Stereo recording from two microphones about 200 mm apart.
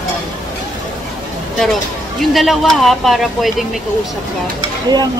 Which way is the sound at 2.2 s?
Centre (ahead or behind).